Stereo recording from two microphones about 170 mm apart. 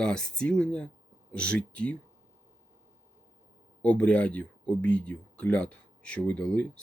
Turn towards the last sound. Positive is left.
turn(degrees=5)  # may be behind; listen again after turning